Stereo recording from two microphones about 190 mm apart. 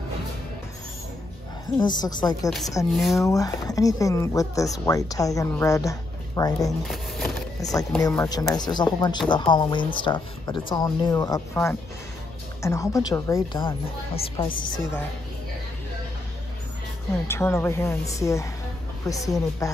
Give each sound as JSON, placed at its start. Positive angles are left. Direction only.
{"t": 1.8, "sound": "speech", "side_deg": 20}
{"t": 2.9, "sound": "speech", "side_deg": 0}
{"t": 3.2, "sound": "speech", "side_deg": 15}
{"t": 6.9, "sound": "vehicle", "side_deg": 0}
{"t": 8.3, "sound": "speech", "side_deg": 20}
{"t": 17.3, "sound": "speech", "side_deg": 10}